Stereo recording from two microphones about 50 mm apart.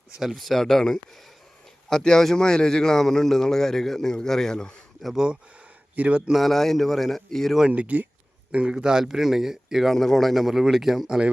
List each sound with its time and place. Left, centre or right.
0.2 s speech: centre
5.1 s a man's voice: centre
6.3 s speech: centre
7.7 s speech: right
8.7 s speech: centre
9.9 s speech: centre